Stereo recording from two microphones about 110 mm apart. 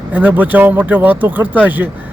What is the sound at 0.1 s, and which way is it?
Speech, 15° right (ahead or behind).